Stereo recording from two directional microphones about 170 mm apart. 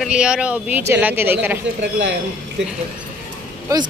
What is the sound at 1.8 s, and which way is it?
Speech, 90° right.